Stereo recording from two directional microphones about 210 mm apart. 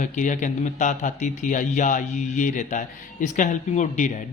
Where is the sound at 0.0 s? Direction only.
35° left (ahead or behind).